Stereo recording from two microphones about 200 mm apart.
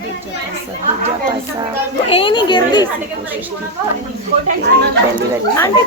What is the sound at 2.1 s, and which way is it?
Speech, 25° left (ahead or behind).